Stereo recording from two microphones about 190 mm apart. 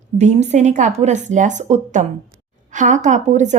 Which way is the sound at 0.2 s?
40° right (ahead or behind).